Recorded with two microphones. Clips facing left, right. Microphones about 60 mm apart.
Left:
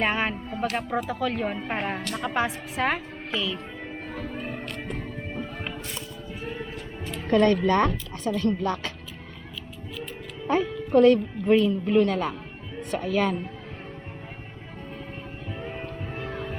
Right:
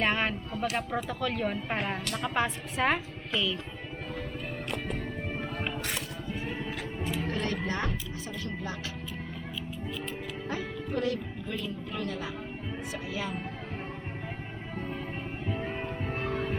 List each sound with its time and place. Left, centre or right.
0.0 s a woman's voice: centre
1.6 s a woman's voice: centre
4.1 s music: left
7.3 s speech: left
10.5 s a woman's voice: left
15.4 s music: centre
16.0 s a sound: right